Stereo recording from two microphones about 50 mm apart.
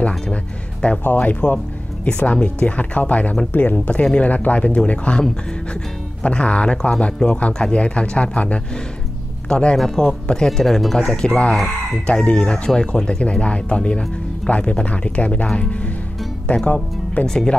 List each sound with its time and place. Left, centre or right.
1.0 s speech: left
6.2 s speech: left
9.8 s speech: centre
11.1 s speech: left
11.5 s speech: centre
12.1 s speech: left
17.3 s speech: centre